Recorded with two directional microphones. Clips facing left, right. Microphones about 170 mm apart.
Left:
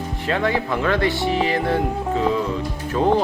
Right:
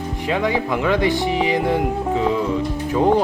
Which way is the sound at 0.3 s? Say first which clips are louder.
Right 1 dB; 15° right (ahead or behind).